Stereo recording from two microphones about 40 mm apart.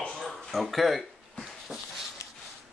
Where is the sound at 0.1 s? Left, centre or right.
Centre.